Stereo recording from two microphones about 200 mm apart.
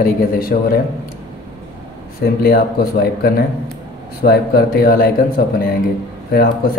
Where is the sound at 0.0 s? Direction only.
45° left (ahead or behind).